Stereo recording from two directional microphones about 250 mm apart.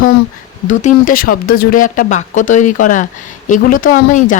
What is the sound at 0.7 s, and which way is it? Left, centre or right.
Speech, left.